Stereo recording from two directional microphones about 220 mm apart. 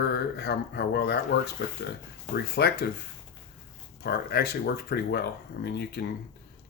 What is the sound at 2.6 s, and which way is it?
Speech, 45° left (ahead or behind).